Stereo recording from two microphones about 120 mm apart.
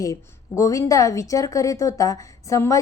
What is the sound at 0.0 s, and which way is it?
A woman's voice, 25° left (ahead or behind).